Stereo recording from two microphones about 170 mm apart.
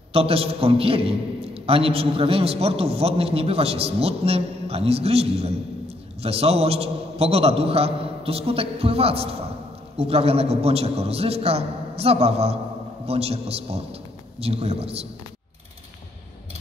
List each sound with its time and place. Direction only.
0.1 s a man's voice: 35° right (ahead or behind)